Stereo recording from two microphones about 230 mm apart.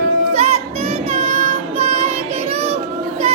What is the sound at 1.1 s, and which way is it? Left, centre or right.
Child singing, right.